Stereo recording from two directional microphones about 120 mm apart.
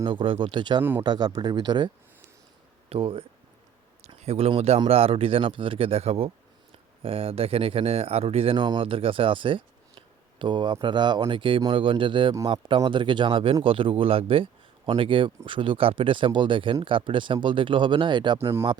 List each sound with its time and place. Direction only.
0.0 s speech: 45° right (ahead or behind)
0.8 s speech: 15° right (ahead or behind)
1.0 s speech: 35° right (ahead or behind)
2.9 s speech: 50° right (ahead or behind)
18.3 s speech: 20° right (ahead or behind)